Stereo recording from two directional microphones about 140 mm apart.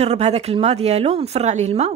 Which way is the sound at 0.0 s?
50° right (ahead or behind).